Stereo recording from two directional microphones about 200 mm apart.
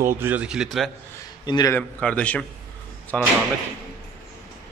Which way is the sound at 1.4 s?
20° left (ahead or behind).